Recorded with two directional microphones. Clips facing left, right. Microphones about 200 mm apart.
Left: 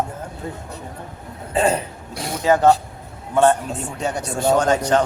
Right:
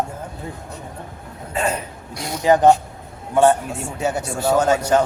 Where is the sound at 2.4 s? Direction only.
15° right (ahead or behind).